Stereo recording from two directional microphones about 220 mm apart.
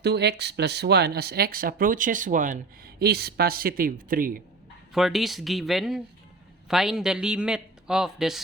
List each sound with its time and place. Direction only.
0.0 s speech: 50° right (ahead or behind)
4.9 s a man's voice: centre (ahead or behind)